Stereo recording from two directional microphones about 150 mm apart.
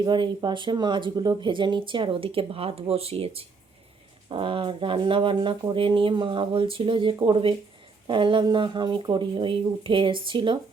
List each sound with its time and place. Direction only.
0.0 s speech: 30° right (ahead or behind)